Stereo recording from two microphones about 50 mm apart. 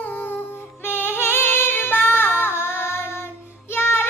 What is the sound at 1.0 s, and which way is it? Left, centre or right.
Female singing, left.